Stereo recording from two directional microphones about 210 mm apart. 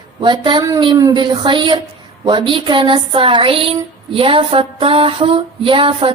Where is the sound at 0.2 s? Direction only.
20° right (ahead or behind).